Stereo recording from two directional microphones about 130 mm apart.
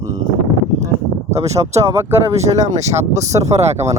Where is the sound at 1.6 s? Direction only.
20° right (ahead or behind).